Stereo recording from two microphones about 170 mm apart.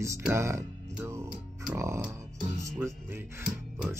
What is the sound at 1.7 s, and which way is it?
Speech, 10° right (ahead or behind).